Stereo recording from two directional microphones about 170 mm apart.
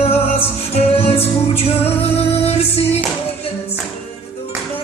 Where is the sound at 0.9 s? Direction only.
35° left (ahead or behind).